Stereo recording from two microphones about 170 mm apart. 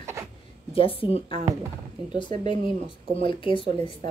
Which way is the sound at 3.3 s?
30° left (ahead or behind).